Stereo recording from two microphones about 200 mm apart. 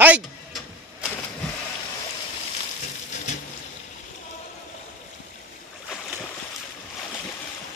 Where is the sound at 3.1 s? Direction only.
35° left (ahead or behind).